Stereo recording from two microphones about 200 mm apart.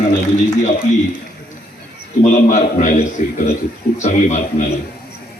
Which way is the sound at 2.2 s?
40° left (ahead or behind).